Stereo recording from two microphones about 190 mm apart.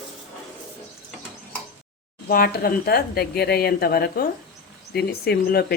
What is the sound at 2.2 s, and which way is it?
Speech, 55° left (ahead or behind).